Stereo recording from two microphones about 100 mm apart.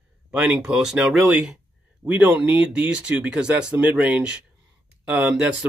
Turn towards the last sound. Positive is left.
turn(degrees=-10)  # may be behind; listen again after turning